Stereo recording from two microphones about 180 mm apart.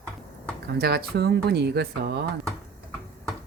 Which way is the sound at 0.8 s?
65° right (ahead or behind).